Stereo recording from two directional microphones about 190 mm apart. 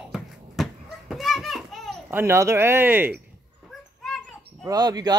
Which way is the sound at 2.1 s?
15° right (ahead or behind).